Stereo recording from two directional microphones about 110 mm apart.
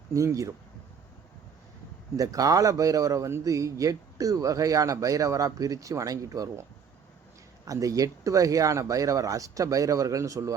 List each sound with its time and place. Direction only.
0.1 s speech: 30° right (ahead or behind)
2.1 s a man's voice: 30° right (ahead or behind)